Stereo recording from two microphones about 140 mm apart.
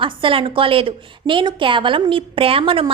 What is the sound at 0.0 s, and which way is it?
A woman's voice, 40° right (ahead or behind).